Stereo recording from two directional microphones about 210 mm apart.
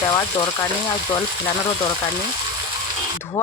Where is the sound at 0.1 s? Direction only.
20° left (ahead or behind).